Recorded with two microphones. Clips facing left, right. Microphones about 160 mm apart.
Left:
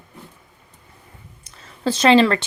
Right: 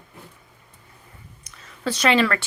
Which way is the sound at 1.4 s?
30° left (ahead or behind).